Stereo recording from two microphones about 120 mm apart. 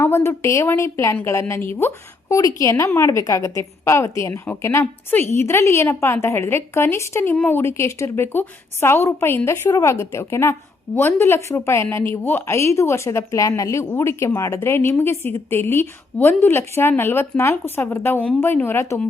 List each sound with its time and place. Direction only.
0.0 s a woman's voice: 20° left (ahead or behind)